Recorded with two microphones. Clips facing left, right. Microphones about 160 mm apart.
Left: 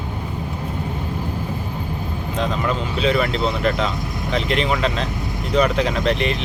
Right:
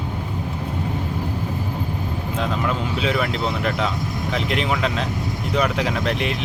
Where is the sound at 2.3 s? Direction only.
5° right (ahead or behind).